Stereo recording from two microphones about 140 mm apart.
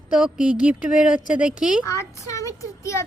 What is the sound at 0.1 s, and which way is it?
Speech, 5° right (ahead or behind).